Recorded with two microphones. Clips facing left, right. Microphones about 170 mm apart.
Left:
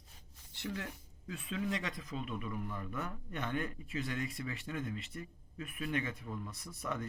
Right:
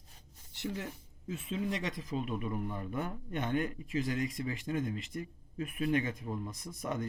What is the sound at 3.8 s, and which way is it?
Speech, 30° left (ahead or behind).